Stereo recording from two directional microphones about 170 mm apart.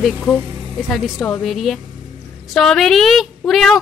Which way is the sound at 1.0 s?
Centre (ahead or behind).